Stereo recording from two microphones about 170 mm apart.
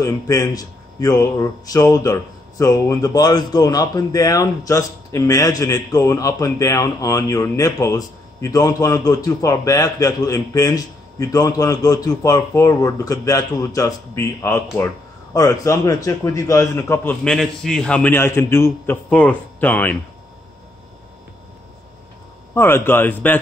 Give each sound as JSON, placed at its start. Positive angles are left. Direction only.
{"t": 0.0, "sound": "a man's voice", "side_deg": 20}
{"t": 22.5, "sound": "a man's voice", "side_deg": 15}